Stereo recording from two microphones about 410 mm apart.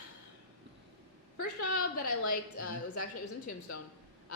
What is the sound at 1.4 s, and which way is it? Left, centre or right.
A woman's voice, left.